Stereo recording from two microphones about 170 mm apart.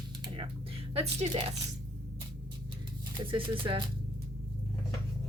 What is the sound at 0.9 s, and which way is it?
Speech, 35° right (ahead or behind).